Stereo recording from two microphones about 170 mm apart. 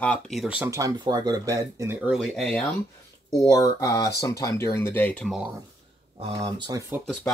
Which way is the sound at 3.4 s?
20° left (ahead or behind).